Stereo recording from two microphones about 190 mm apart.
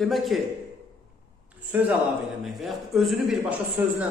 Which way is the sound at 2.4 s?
Centre (ahead or behind).